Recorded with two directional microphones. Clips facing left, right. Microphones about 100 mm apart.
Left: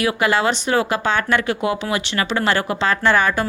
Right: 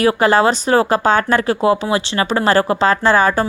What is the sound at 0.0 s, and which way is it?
Speech, 40° right (ahead or behind).